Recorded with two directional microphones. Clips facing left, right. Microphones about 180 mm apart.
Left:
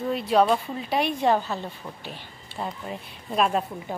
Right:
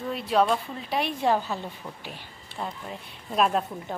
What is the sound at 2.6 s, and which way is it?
A woman's voice, centre (ahead or behind).